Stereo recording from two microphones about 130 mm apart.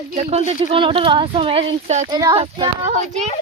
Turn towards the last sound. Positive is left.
turn(degrees=-55)  # may be behind; listen again after turning